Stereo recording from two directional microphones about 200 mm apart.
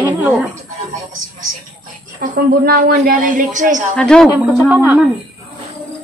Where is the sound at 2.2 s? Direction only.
45° right (ahead or behind).